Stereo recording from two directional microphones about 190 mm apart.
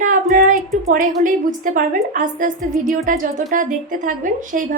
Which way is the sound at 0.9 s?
45° right (ahead or behind).